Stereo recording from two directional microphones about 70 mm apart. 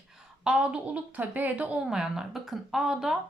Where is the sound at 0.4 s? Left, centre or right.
Centre.